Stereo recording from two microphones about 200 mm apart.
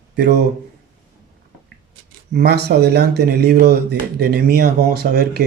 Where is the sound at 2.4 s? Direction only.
55° right (ahead or behind).